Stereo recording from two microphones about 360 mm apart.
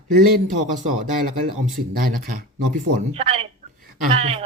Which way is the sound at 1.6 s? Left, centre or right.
Right.